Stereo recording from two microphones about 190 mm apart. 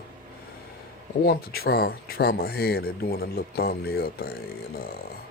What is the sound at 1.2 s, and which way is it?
Speech, 55° left (ahead or behind).